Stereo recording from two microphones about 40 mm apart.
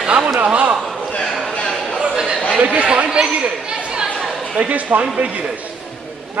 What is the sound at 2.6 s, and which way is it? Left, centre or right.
Speech, right.